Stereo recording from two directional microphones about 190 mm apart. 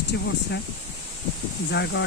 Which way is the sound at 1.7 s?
60° left (ahead or behind).